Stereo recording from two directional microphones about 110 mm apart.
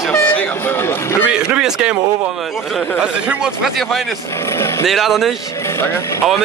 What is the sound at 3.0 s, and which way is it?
A man's voice, 5° right (ahead or behind).